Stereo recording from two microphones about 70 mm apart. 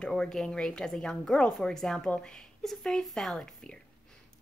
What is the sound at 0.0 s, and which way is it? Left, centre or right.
A woman's voice, centre.